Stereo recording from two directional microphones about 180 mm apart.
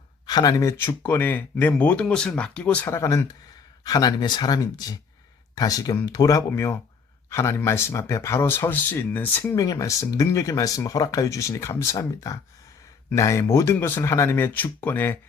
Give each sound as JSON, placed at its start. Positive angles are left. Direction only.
{"t": 0.3, "sound": "speech", "side_deg": 20}